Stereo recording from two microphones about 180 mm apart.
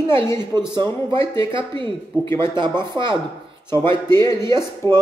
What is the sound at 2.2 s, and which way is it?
Speech, 15° left (ahead or behind).